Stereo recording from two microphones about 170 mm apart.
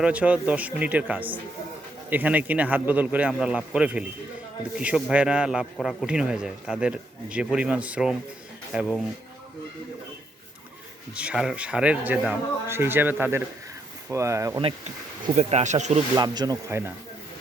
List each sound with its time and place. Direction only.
0.0 s a man's voice: 10° right (ahead or behind)
11.1 s speech: 5° right (ahead or behind)
15.4 s speech: 40° right (ahead or behind)
16.1 s speech: 25° right (ahead or behind)